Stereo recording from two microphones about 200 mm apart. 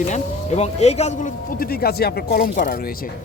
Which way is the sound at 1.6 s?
50° left (ahead or behind).